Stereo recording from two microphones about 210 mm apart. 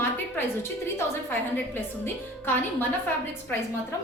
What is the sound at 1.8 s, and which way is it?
A woman's voice, 10° left (ahead or behind).